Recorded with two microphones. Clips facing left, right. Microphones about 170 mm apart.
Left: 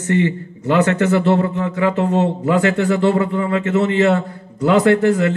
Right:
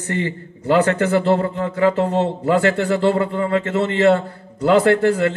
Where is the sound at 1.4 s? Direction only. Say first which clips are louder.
Right 1 dB; 35° right (ahead or behind).